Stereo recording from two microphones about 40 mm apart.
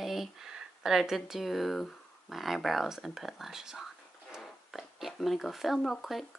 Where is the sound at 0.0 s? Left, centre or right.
Centre.